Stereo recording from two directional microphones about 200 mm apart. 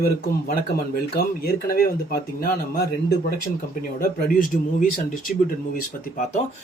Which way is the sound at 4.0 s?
45° left (ahead or behind).